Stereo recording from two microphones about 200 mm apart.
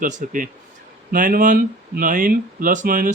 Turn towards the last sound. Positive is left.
turn(degrees=-45)  # may be behind; listen again after turning